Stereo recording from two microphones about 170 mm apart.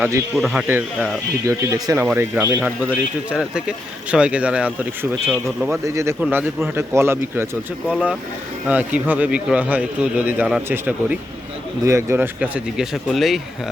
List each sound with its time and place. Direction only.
0.0 s a man's voice: 15° right (ahead or behind)
0.3 s speech: centre (ahead or behind)
1.5 s a man's voice: 20° right (ahead or behind)
5.8 s a man's voice: 20° right (ahead or behind); by 13.4 s centre (ahead or behind)